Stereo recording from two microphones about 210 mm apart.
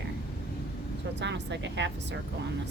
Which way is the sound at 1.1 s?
55° right (ahead or behind).